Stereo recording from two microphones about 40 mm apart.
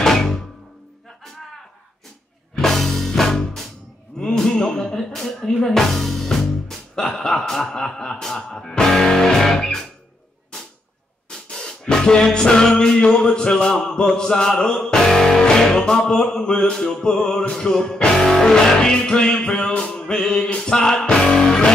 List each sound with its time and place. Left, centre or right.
0.0 s music: centre
2.5 s music: centre
4.2 s gasp: centre
5.8 s music: centre
10.5 s cap gun: left
11.5 s music: centre